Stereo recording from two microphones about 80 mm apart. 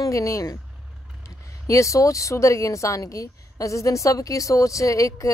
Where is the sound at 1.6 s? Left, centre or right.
Left.